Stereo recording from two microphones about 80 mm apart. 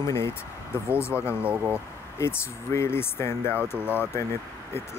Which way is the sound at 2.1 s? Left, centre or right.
Left.